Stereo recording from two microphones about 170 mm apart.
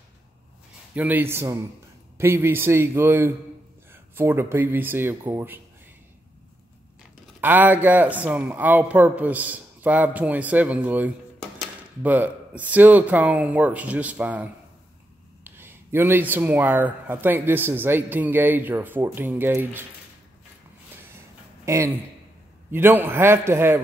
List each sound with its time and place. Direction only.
0.9 s speech: 10° right (ahead or behind)
7.3 s speech: 10° right (ahead or behind)
21.6 s speech: 15° right (ahead or behind)